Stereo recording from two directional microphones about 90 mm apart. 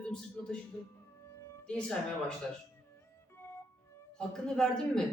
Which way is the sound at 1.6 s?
10° left (ahead or behind).